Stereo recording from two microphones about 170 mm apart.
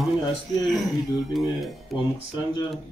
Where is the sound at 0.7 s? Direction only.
Centre (ahead or behind).